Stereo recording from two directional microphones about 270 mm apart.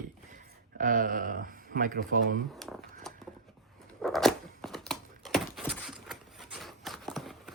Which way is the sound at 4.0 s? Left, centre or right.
Centre.